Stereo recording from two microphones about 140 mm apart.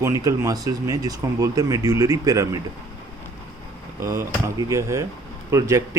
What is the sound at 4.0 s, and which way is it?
Speech, 20° right (ahead or behind).